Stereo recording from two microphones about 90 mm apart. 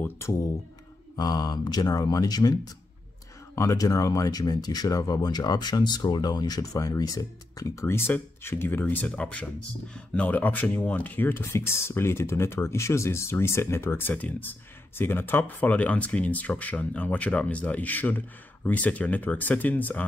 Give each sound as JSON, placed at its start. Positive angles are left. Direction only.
{"t": 0.0, "sound": "speech", "side_deg": 35}
{"t": 1.1, "sound": "speech", "side_deg": 45}
{"t": 7.8, "sound": "speech", "side_deg": 25}